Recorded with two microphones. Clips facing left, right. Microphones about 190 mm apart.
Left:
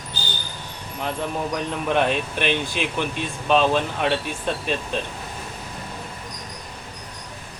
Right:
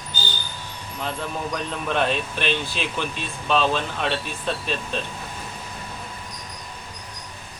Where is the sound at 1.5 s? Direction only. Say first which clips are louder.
Left 3 dB; 15° left (ahead or behind).